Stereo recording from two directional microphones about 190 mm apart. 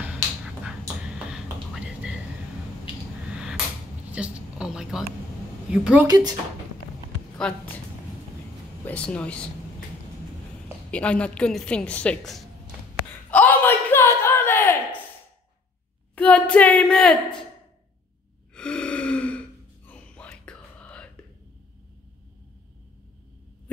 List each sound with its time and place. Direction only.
0.7 s music: 5° right (ahead or behind)
4.1 s a woman's voice: 5° right (ahead or behind)
6.0 s speech: 20° right (ahead or behind)
7.4 s a woman's voice: 5° left (ahead or behind)
8.8 s speech: 5° left (ahead or behind)
10.9 s a woman's voice: 5° left (ahead or behind)
13.3 s a sound: 10° left (ahead or behind)
16.2 s a sound: 5° left (ahead or behind)
18.5 s gasp: 5° left (ahead or behind)
19.9 s whispering: 5° left (ahead or behind)